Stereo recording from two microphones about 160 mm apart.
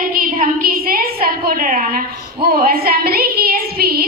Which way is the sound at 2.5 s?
70° right (ahead or behind).